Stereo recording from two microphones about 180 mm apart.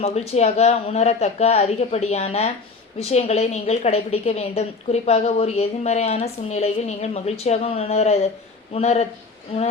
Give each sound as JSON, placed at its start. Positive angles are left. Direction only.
{"t": 0.0, "sound": "a woman's voice", "side_deg": 35}